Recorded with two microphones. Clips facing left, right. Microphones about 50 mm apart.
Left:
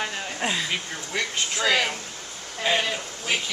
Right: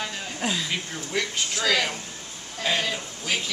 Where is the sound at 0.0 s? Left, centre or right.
Left.